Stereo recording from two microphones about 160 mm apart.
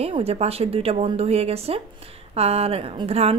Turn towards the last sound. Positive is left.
turn(degrees=-40)  # may be behind; listen again after turning